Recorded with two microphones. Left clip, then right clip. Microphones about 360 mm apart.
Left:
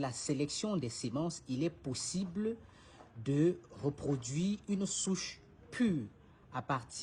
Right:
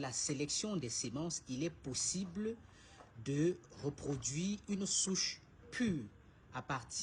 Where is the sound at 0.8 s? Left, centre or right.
Centre.